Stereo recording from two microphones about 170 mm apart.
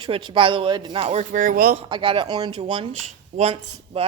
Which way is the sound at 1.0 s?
50° right (ahead or behind).